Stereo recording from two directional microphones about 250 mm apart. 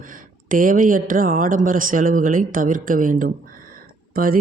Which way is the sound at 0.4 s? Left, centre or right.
Right.